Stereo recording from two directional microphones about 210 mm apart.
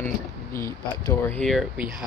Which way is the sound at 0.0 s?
10° left (ahead or behind).